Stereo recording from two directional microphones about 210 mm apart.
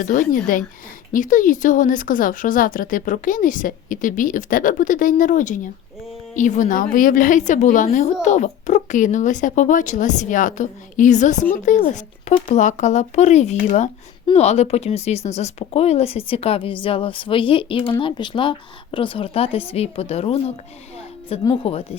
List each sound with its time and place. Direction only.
0.0 s a woman's voice: 40° left (ahead or behind)
21.5 s speech: 25° left (ahead or behind)